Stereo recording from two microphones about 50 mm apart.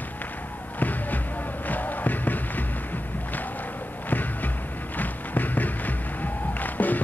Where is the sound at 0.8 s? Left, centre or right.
Left.